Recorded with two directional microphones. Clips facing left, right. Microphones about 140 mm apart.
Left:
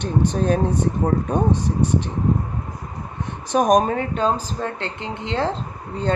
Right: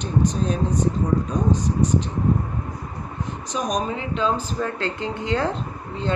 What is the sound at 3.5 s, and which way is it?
Speech, 55° left (ahead or behind).